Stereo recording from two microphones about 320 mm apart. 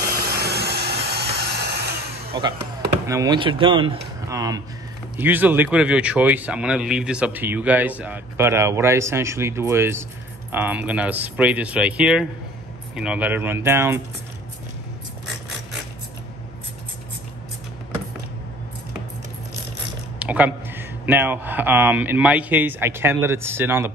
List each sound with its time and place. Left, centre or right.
0.4 s vacuum cleaner: right
2.3 s speech: centre
20.2 s speech: centre